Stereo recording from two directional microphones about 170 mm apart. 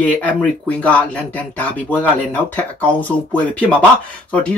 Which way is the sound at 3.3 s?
5° left (ahead or behind).